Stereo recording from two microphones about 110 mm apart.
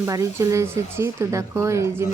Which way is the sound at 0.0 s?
25° right (ahead or behind).